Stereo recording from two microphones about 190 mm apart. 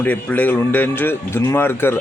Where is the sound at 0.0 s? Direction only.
10° left (ahead or behind).